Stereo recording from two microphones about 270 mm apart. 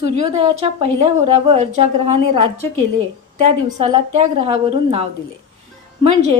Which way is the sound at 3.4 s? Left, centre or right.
Right.